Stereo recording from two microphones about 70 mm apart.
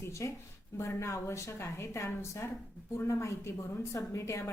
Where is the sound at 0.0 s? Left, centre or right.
Left.